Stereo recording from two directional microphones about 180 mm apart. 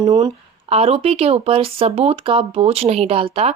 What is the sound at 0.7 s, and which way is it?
Speech, 35° right (ahead or behind).